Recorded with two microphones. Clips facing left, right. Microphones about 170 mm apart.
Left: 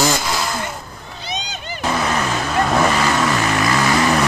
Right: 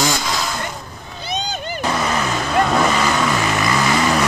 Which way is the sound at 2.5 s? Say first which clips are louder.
Even; centre (ahead or behind).